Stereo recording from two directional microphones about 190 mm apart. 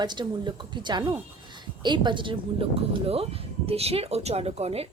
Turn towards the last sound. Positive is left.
turn(degrees=-30)  # may be behind; listen again after turning